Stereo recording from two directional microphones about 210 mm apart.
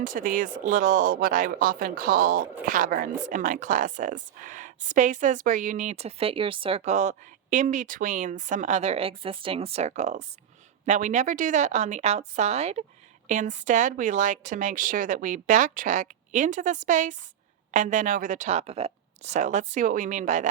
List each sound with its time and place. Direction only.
0.0 s speech: 40° right (ahead or behind)